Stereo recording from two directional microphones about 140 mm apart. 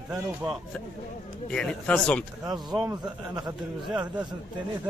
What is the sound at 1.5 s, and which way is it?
Speech, 5° left (ahead or behind).